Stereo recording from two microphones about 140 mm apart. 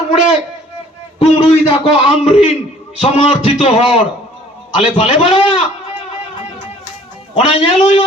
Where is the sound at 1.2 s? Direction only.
45° left (ahead or behind).